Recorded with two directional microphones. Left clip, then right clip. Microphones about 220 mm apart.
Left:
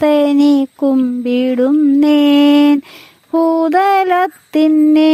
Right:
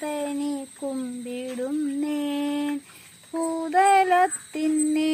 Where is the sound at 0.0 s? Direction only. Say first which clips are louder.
Left 18 dB; 50° left (ahead or behind).